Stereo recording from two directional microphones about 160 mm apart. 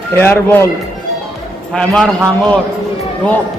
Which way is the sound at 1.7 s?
5° left (ahead or behind).